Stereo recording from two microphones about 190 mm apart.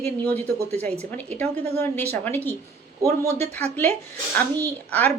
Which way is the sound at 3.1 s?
35° right (ahead or behind).